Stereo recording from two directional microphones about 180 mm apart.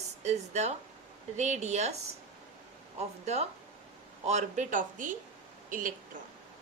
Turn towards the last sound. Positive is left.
turn(degrees=-50)  # may be behind; listen again after turning